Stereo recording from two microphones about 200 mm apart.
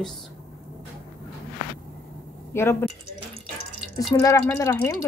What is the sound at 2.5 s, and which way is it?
Speech, 10° left (ahead or behind).